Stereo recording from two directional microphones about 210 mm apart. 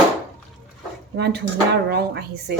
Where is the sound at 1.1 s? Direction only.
50° right (ahead or behind).